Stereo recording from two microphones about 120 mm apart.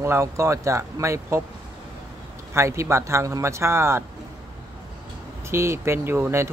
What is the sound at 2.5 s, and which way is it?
Speech, 25° right (ahead or behind).